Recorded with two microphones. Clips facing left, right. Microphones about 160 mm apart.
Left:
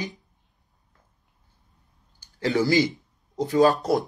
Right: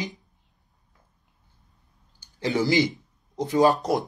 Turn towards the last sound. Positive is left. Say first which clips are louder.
# left 1 dB
turn(degrees=-15)  # may be behind; listen again after turning